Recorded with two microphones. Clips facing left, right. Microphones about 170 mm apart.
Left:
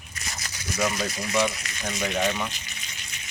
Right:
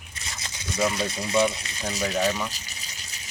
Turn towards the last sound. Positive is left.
turn(degrees=-35)  # may be behind; listen again after turning